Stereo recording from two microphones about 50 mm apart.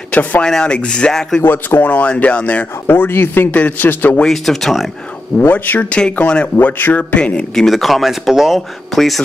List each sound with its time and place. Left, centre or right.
0.1 s speech: left
0.4 s speech: centre
1.4 s speech: left
1.9 s speech: left
2.9 s a man's voice: left
4.3 s speech: centre
5.5 s a man's voice: left
6.5 s a man's voice: left
7.2 s speech: left
7.5 s speech: centre